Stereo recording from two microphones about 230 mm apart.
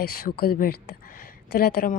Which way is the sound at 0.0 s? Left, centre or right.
Left.